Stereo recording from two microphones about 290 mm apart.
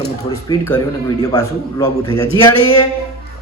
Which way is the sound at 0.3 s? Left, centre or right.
Centre.